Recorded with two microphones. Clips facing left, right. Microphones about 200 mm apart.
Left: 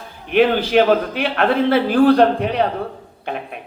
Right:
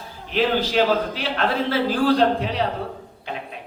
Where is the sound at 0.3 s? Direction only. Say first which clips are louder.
Left 6 dB; 60° left (ahead or behind).